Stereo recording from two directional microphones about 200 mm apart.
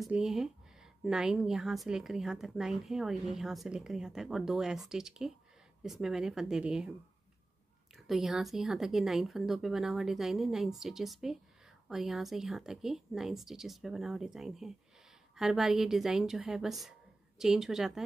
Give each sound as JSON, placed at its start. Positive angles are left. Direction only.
{"t": 0.0, "sound": "speech", "side_deg": 0}
{"t": 7.9, "sound": "speech", "side_deg": 0}